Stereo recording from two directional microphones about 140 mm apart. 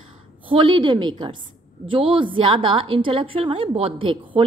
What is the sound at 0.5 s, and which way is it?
A woman's voice, 40° right (ahead or behind).